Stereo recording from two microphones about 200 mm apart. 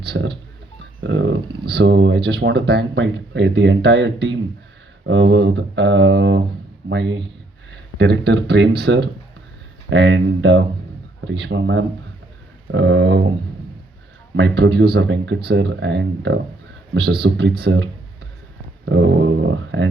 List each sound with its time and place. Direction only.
0.0 s speech: 60° right (ahead or behind)
1.0 s speech: 70° right (ahead or behind)
14.5 s speech: 60° right (ahead or behind)
18.9 s speech: 70° right (ahead or behind)